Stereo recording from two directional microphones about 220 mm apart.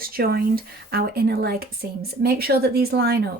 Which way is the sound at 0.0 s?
40° right (ahead or behind).